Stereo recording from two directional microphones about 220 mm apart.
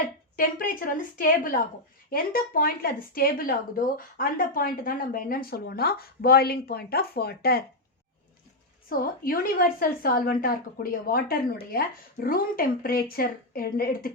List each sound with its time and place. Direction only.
0.0 s speech: 40° left (ahead or behind)
8.9 s speech: 40° left (ahead or behind)